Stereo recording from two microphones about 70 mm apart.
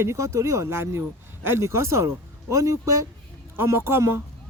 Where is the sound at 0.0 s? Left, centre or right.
Right.